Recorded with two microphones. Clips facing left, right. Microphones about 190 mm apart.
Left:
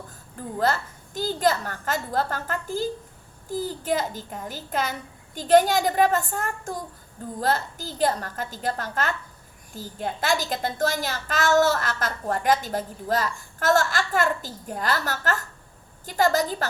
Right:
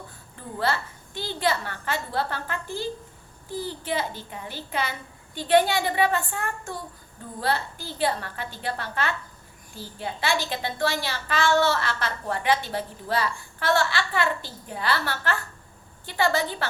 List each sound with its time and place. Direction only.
0.3 s a woman's voice: 45° left (ahead or behind)